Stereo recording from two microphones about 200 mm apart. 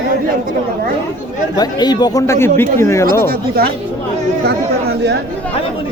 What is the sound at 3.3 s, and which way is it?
Speech, 50° right (ahead or behind).